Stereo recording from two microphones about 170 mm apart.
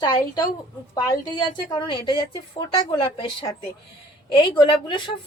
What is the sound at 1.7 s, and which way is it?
A woman's voice, 30° left (ahead or behind).